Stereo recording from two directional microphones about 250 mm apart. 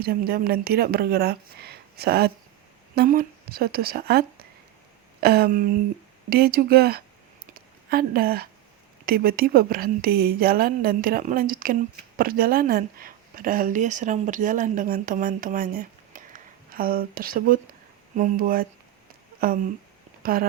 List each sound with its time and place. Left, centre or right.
0.0 s a woman's voice: right
7.5 s a sound: right
9.0 s a woman's voice: right